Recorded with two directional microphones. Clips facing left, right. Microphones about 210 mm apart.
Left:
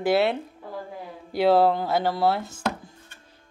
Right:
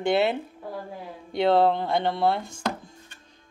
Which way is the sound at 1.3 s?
5° left (ahead or behind).